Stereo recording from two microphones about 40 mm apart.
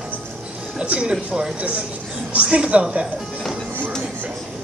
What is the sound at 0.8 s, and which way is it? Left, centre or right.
Speech, right.